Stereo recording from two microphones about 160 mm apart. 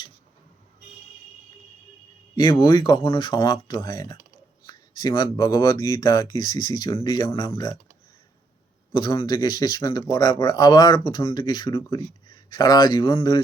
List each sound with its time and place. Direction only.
2.3 s speech: 30° left (ahead or behind)
8.9 s speech: 25° left (ahead or behind)